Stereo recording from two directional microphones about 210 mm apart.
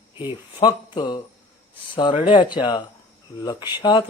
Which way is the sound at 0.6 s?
20° left (ahead or behind).